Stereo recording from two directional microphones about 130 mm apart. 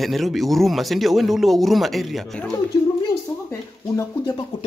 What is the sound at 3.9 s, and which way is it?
Speech, 30° left (ahead or behind).